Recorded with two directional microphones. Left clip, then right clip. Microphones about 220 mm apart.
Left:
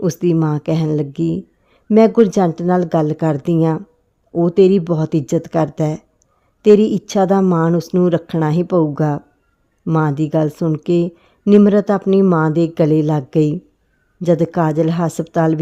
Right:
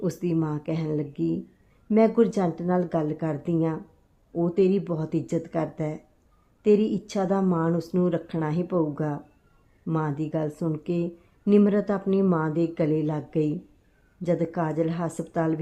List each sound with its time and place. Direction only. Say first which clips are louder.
0.0 s a woman's voice: left 10 dB; 45° left (ahead or behind)